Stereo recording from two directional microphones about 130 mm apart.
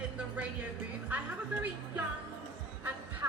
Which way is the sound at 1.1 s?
10° right (ahead or behind).